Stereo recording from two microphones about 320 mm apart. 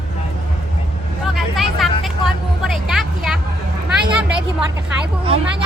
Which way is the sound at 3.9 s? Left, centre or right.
Centre.